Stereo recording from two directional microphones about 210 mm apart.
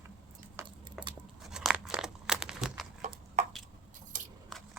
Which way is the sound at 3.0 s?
35° right (ahead or behind).